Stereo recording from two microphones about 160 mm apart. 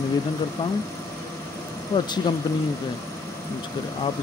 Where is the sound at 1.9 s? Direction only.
20° left (ahead or behind).